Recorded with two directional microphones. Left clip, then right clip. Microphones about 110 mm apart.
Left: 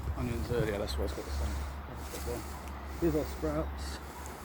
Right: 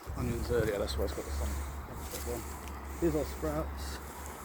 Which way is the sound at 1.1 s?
35° left (ahead or behind).